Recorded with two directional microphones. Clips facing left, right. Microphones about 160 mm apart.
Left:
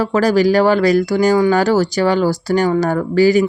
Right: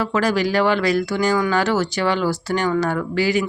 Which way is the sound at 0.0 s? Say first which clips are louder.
Left 6 dB; 40° left (ahead or behind).